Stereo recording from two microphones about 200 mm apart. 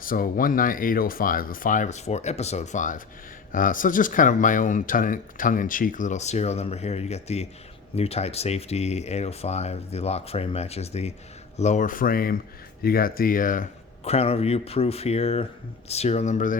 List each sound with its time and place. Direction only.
0.0 s speech: 45° left (ahead or behind)